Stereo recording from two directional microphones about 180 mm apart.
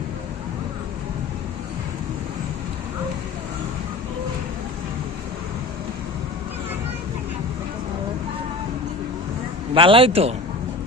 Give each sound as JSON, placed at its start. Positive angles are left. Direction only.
{"t": 9.7, "sound": "a man's voice", "side_deg": -30}